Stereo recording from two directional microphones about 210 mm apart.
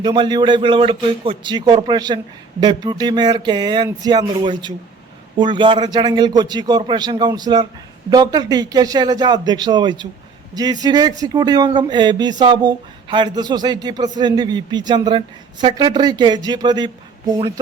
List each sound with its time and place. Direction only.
0.0 s a man's voice: 20° right (ahead or behind)